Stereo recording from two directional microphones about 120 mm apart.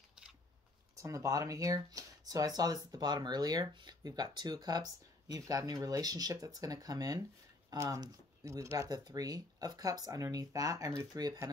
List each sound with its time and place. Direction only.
0.9 s speech: 25° right (ahead or behind)